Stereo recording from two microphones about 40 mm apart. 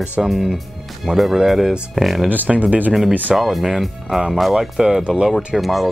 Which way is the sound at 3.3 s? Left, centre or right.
Centre.